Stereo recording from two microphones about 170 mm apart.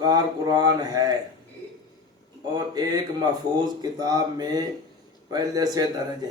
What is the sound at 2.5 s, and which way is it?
Speech, 25° right (ahead or behind).